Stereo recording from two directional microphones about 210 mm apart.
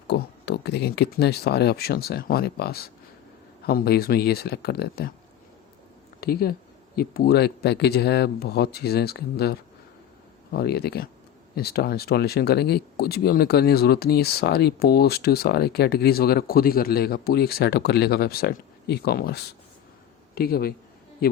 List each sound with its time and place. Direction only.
0.1 s speech: 50° left (ahead or behind)
6.1 s a man's voice: 45° left (ahead or behind)